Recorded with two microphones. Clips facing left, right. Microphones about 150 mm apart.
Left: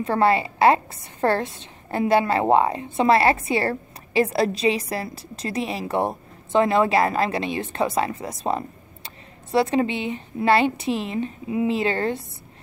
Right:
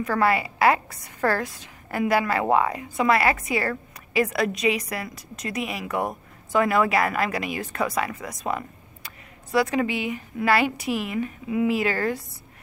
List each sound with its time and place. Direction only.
0.0 s a woman's voice: 25° left (ahead or behind)